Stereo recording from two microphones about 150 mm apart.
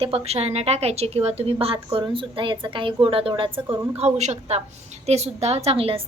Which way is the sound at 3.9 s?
45° right (ahead or behind).